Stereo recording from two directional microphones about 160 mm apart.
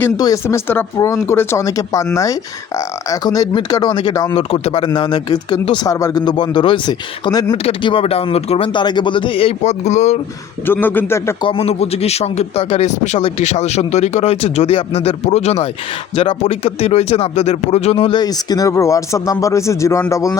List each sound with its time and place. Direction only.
0.2 s speech: 20° left (ahead or behind)
4.4 s speech: 35° left (ahead or behind)
7.5 s speech: 35° left (ahead or behind)
10.7 s speech: 10° left (ahead or behind)
11.4 s speech: 35° left (ahead or behind)
18.2 s speech: 25° left (ahead or behind)